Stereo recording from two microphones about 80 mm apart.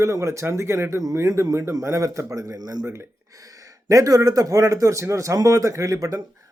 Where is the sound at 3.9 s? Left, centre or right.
Right.